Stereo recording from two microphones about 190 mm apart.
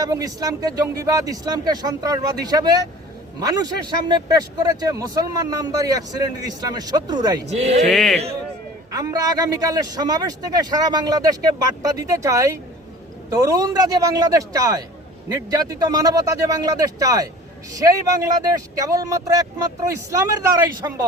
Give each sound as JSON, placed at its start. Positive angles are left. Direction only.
{"t": 0.0, "sound": "speech", "side_deg": -20}
{"t": 7.4, "sound": "speech", "side_deg": -35}
{"t": 7.9, "sound": "speech", "side_deg": 0}
{"t": 8.9, "sound": "speech", "side_deg": -20}